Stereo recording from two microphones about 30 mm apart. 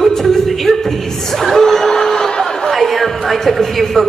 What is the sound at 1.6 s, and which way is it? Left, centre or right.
Vehicle, centre.